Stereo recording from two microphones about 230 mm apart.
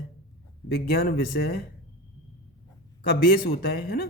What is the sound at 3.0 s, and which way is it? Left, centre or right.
A man's voice, left.